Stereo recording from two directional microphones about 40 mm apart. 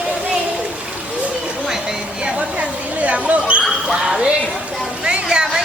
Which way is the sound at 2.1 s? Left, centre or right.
Right.